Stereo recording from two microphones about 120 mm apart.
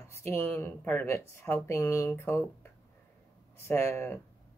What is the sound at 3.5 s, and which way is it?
Speech, 20° left (ahead or behind).